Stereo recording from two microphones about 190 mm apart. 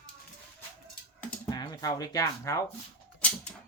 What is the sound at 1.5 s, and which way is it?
Speech, 20° left (ahead or behind).